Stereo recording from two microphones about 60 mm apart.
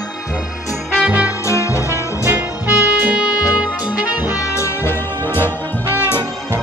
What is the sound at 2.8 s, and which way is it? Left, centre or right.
Music, right.